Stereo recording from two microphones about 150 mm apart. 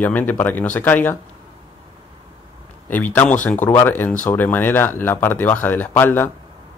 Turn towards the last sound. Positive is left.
turn(degrees=15)  # may be behind; listen again after turning